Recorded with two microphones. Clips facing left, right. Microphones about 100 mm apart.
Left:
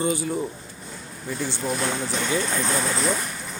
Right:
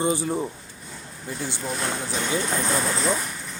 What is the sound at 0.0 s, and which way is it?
Speech, 25° right (ahead or behind).